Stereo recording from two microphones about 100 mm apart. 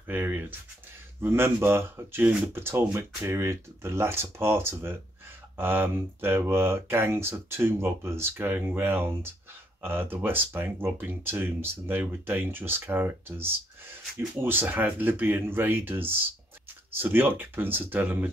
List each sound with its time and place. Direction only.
0.0 s speech: 20° right (ahead or behind)